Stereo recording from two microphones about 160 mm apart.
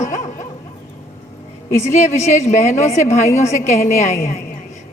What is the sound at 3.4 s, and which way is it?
Speech, 45° left (ahead or behind).